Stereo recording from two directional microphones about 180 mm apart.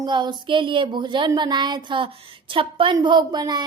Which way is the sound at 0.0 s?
25° right (ahead or behind).